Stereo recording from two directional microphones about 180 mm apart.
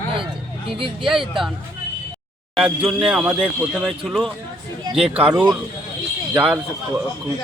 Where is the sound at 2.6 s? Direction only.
Centre (ahead or behind).